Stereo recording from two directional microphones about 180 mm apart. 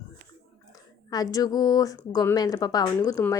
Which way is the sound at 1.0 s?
20° left (ahead or behind).